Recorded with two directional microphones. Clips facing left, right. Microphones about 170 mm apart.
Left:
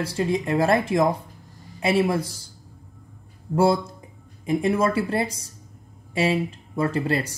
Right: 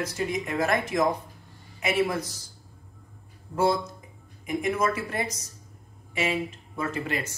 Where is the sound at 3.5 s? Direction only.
30° left (ahead or behind).